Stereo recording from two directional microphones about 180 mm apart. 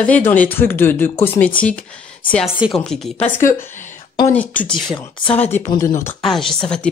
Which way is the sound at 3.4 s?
15° left (ahead or behind).